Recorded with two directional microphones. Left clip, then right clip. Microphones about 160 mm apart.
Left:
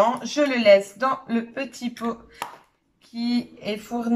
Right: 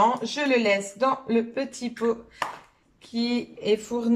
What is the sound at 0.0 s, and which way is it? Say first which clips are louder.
Speech: left 2 dB; 25° right (ahead or behind).